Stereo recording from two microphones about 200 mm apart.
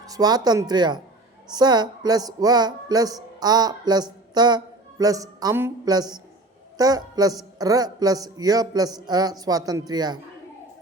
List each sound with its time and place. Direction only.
0.0 s speech: 20° right (ahead or behind)